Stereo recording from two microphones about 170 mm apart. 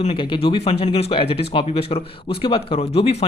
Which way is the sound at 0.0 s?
30° left (ahead or behind).